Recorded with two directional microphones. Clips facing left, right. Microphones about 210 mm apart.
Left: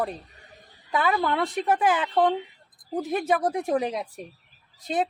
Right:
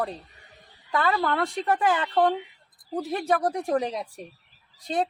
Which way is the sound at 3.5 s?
5° left (ahead or behind).